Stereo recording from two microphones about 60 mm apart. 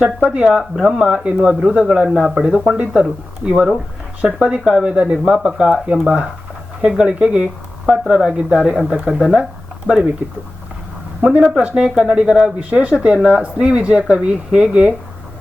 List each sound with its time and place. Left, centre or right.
0.3 s speech: centre
11.2 s speech: right
11.7 s speech: centre
14.7 s speech: right